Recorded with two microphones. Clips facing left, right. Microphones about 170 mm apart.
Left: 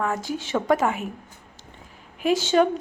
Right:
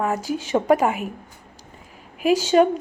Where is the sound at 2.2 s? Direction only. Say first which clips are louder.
Right 3 dB; 5° right (ahead or behind).